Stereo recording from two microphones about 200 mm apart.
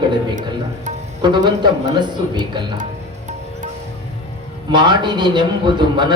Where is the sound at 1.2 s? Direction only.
20° right (ahead or behind).